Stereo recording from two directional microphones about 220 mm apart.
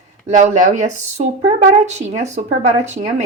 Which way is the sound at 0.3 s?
35° right (ahead or behind).